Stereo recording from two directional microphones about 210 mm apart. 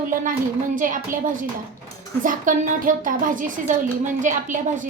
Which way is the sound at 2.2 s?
40° right (ahead or behind).